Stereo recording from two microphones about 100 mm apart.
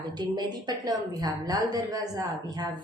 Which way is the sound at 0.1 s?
45° right (ahead or behind).